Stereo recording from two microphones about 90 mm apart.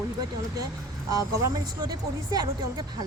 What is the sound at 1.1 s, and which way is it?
Speech, 45° right (ahead or behind).